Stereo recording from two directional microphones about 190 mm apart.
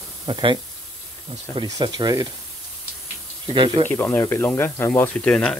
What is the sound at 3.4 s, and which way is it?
Speech, 25° right (ahead or behind).